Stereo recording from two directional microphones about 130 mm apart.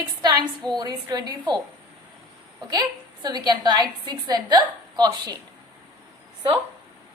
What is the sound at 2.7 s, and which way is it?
A woman's voice, 30° right (ahead or behind).